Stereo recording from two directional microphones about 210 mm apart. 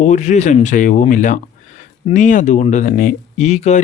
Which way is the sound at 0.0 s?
35° left (ahead or behind).